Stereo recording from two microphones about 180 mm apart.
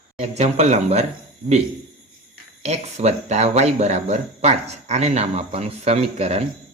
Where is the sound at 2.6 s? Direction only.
40° right (ahead or behind).